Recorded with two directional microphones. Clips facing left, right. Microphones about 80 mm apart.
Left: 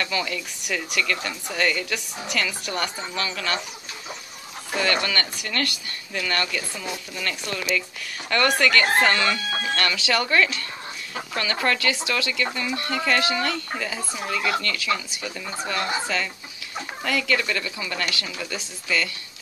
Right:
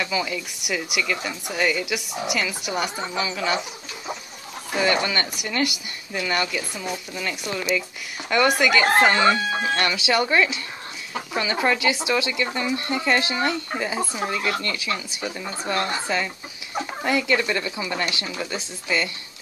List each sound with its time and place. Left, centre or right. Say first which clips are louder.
0.0 s speech: right 1 dB; centre
4.7 s speech: right 2 dB; centre